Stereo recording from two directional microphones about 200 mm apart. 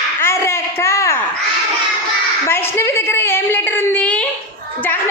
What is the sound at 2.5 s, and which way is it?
A woman's voice, 10° left (ahead or behind).